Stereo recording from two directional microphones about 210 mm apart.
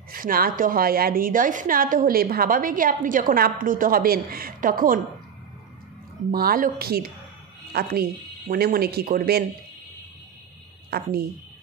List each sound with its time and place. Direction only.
0.1 s a woman's voice: 45° right (ahead or behind)
6.3 s speech: 45° right (ahead or behind)
10.9 s a woman's voice: 50° right (ahead or behind)